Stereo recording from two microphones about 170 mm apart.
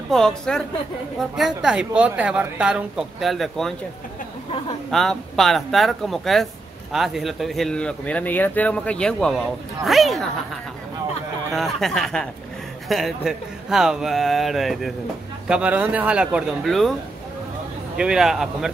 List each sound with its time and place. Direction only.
0.1 s a man's voice: 5° left (ahead or behind)
4.9 s a man's voice: centre (ahead or behind)
11.5 s a man's voice: centre (ahead or behind)
17.9 s a man's voice: 5° right (ahead or behind)